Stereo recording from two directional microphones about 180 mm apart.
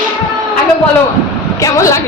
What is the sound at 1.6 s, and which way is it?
Speech, 20° left (ahead or behind).